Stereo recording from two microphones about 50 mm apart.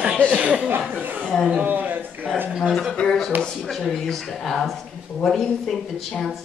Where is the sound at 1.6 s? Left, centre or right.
Right.